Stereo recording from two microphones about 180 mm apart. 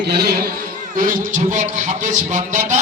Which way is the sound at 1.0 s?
45° right (ahead or behind).